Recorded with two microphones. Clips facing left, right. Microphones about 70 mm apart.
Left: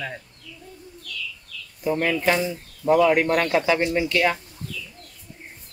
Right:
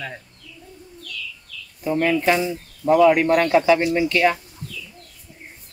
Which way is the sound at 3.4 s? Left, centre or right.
Right.